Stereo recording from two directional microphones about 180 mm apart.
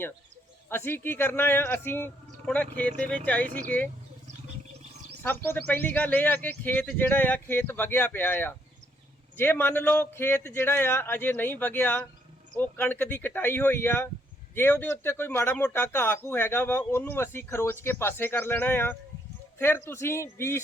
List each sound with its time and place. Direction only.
0.7 s speech: 10° left (ahead or behind)
5.2 s a man's voice: 10° left (ahead or behind)